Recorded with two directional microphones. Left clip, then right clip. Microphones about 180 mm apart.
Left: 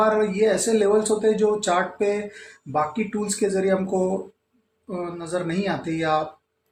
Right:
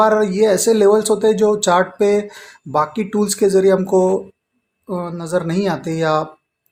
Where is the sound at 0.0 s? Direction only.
45° right (ahead or behind).